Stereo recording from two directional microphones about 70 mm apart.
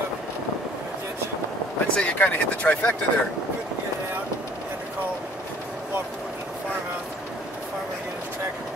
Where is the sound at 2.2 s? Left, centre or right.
Left.